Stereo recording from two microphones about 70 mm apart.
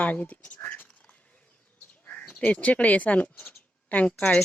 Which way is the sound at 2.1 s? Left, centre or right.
Centre.